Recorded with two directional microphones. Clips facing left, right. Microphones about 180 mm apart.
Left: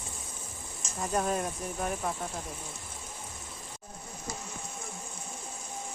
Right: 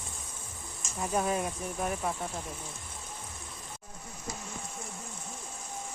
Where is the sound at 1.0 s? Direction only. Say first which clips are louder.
Even; 5° right (ahead or behind).